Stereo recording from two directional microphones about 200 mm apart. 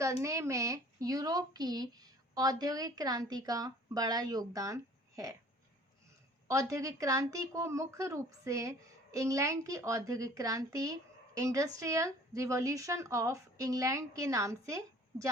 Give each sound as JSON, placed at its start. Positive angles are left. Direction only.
{"t": 0.0, "sound": "speech", "side_deg": -15}
{"t": 6.5, "sound": "a woman's voice", "side_deg": -15}